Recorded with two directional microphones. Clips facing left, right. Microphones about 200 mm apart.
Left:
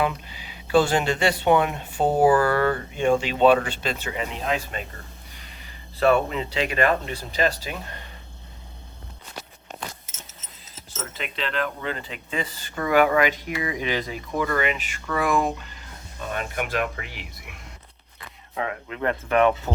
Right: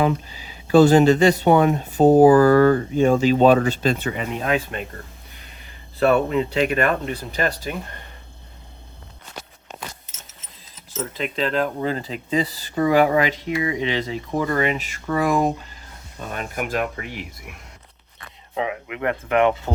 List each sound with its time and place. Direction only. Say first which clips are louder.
0.0 s speech: right 5 dB; 40° right (ahead or behind)
3.9 s speech: right 5 dB; 55° right (ahead or behind)
6.0 s speech: right 3 dB; 50° right (ahead or behind)
10.9 s speech: right 7 dB; 40° right (ahead or behind)
18.5 s speech: right 4 dB; 15° right (ahead or behind)